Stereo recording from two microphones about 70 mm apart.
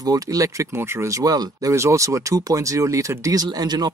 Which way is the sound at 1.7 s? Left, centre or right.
Right.